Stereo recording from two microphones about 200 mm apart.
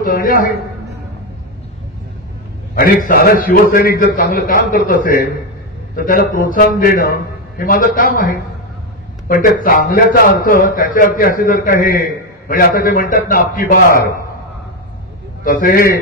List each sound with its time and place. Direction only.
0.0 s a man's voice: 45° left (ahead or behind)
2.7 s a man's voice: 45° left (ahead or behind)
15.4 s a man's voice: 45° left (ahead or behind)